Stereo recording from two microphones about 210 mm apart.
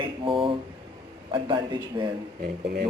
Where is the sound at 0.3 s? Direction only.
25° right (ahead or behind).